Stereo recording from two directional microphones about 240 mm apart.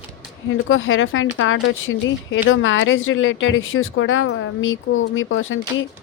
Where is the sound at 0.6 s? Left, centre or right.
Left.